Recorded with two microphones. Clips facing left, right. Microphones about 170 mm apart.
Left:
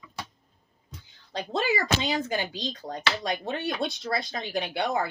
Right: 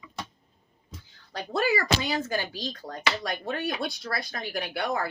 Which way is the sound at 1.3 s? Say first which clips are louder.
Right 1 dB; 20° left (ahead or behind).